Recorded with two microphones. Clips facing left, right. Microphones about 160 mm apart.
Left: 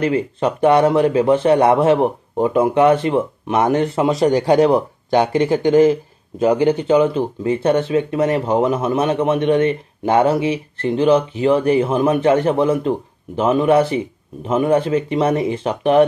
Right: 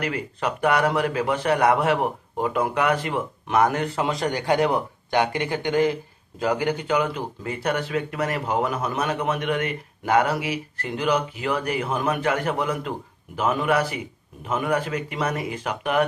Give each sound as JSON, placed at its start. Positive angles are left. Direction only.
{"t": 0.0, "sound": "speech", "side_deg": 25}